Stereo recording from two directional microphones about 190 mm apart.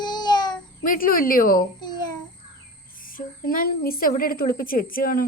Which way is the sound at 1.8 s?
20° left (ahead or behind).